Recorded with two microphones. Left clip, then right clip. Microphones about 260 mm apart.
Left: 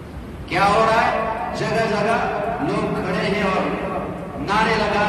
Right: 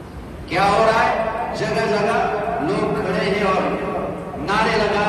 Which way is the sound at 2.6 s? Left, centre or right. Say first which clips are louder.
Right 2 dB; left.